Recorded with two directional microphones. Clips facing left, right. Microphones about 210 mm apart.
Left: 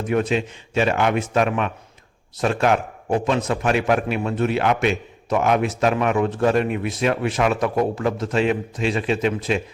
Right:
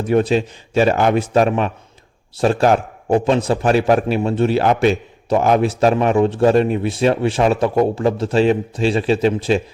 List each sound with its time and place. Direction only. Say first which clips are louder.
0.0 s a man's voice: right 5 dB; 35° right (ahead or behind)